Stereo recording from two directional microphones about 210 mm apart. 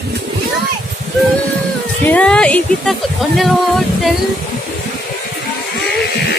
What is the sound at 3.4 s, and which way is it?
A capella, centre (ahead or behind).